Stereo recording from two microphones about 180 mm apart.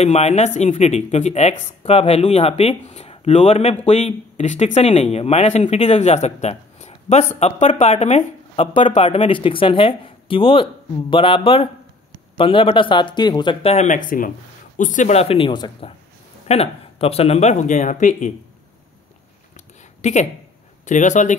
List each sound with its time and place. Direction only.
0.0 s speech: 40° left (ahead or behind)
19.5 s a sound: 40° left (ahead or behind)
20.8 s speech: 45° left (ahead or behind)